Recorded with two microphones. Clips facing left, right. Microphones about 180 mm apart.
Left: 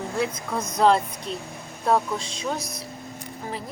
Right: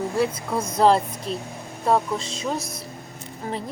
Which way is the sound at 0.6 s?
30° right (ahead or behind).